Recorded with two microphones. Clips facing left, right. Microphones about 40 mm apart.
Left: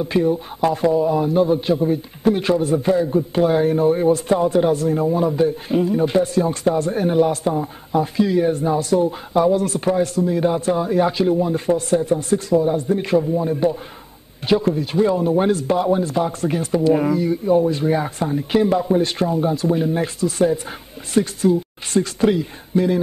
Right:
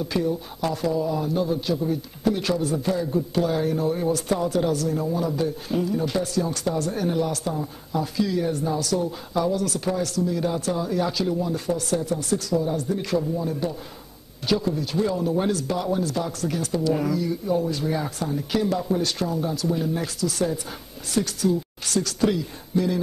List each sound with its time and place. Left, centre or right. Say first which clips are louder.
0.0 s a man's voice: left 6 dB; left